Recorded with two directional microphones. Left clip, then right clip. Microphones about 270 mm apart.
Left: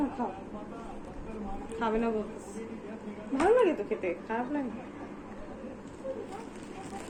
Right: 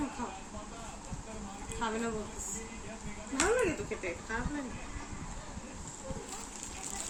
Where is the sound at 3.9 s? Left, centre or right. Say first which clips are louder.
Left 5 dB; centre.